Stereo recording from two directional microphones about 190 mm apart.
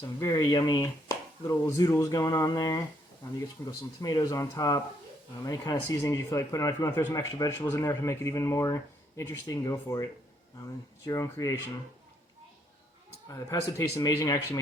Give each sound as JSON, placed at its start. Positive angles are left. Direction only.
{"t": 0.0, "sound": "speech", "side_deg": 20}
{"t": 13.7, "sound": "speech", "side_deg": 15}